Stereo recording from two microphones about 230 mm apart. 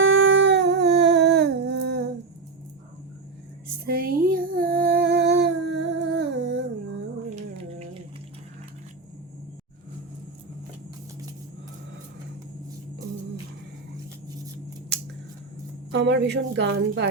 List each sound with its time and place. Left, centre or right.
0.0 s a sound: right
3.8 s female singing: right
15.9 s speech: right